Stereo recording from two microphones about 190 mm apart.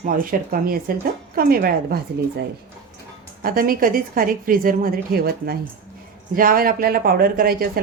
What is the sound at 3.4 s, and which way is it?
Speech, 50° right (ahead or behind).